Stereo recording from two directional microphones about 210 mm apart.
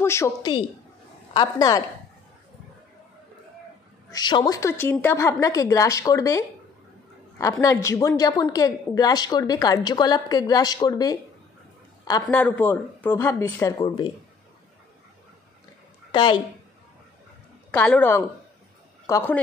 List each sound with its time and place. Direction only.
0.0 s a woman's voice: 15° left (ahead or behind)
4.1 s a woman's voice: 20° left (ahead or behind)
7.6 s a woman's voice: 15° left (ahead or behind)
16.1 s a woman's voice: 20° left (ahead or behind)
17.6 s a woman's voice: 10° left (ahead or behind)